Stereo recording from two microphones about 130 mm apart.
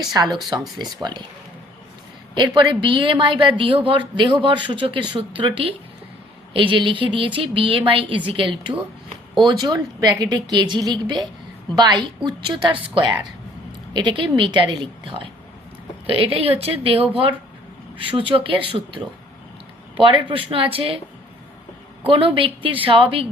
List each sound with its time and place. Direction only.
0.0 s a woman's voice: 30° right (ahead or behind)
2.3 s a woman's voice: 35° right (ahead or behind)
22.0 s a woman's voice: 45° right (ahead or behind)